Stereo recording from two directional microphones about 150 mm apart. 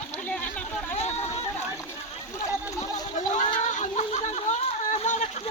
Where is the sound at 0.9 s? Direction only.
45° left (ahead or behind).